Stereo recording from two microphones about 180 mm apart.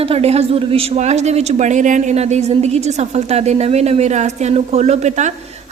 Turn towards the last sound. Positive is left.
turn(degrees=-40)  # may be behind; listen again after turning